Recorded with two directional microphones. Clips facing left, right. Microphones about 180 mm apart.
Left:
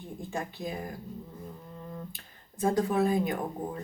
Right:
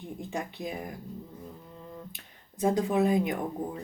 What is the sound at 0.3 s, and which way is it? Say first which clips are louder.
Speech: even; 20° right (ahead or behind).